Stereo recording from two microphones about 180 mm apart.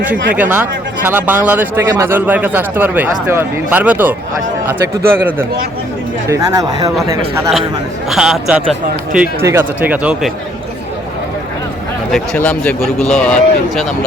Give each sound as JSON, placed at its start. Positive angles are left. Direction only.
{"t": 0.3, "sound": "speech", "side_deg": -10}
{"t": 8.1, "sound": "speech", "side_deg": 0}
{"t": 12.1, "sound": "speech", "side_deg": 5}